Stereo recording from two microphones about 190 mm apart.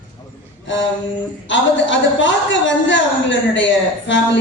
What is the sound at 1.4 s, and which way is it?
A woman's voice, 75° left (ahead or behind).